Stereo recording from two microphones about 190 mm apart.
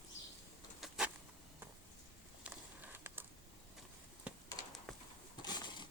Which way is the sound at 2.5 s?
10° right (ahead or behind).